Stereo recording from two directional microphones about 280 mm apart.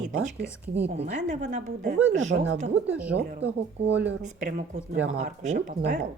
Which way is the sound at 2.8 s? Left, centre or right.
Centre.